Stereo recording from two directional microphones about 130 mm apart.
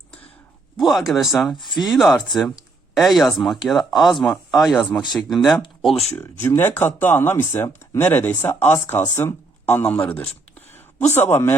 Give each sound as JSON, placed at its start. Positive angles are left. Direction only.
{"t": 0.8, "sound": "speech", "side_deg": 0}
{"t": 6.1, "sound": "speech", "side_deg": 15}